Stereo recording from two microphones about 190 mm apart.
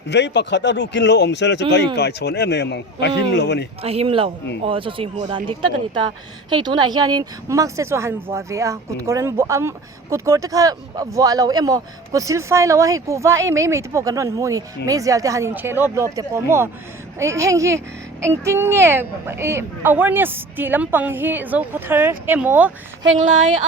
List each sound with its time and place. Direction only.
0.1 s a man's voice: 65° left (ahead or behind)
3.8 s speech: 30° right (ahead or behind)
6.5 s speech: 25° right (ahead or behind); by 22.7 s 10° right (ahead or behind)
23.1 s speech: 40° right (ahead or behind)